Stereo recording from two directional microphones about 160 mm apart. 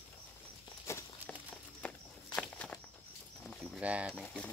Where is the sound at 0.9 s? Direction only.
15° left (ahead or behind).